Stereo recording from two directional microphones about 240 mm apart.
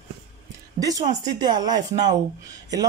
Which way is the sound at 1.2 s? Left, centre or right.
Centre.